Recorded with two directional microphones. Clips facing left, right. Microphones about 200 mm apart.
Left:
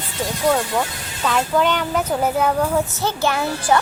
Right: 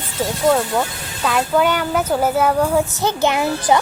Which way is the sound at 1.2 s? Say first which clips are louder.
Right 2 dB; 5° right (ahead or behind).